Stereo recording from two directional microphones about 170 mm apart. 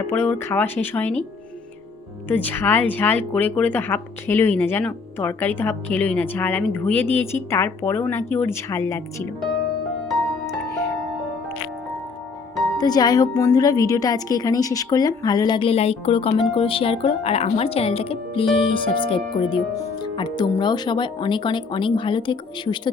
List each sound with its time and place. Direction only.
0.1 s speech: 15° left (ahead or behind)
2.2 s speech: 10° left (ahead or behind)
12.7 s a woman's voice: 25° left (ahead or behind)